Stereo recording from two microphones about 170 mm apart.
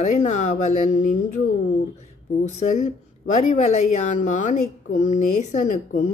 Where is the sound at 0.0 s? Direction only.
50° left (ahead or behind).